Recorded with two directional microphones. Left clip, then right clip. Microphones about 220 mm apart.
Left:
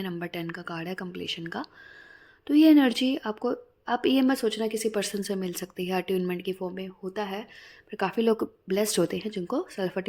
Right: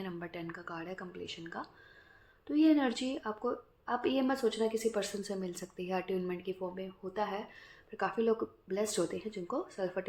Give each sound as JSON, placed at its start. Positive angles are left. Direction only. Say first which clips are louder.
{"t": 0.0, "sound": "a woman's voice", "louder": "left 8 dB", "side_deg": 45}